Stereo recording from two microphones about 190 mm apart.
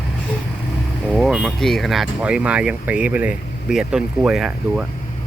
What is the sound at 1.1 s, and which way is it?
Speech, 5° right (ahead or behind).